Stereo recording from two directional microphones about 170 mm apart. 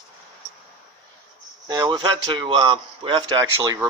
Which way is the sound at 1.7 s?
25° right (ahead or behind).